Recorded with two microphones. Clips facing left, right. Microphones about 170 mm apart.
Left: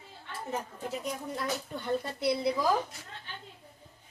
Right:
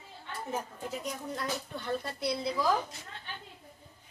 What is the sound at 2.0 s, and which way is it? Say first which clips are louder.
Speech: left 4 dB; 20° left (ahead or behind).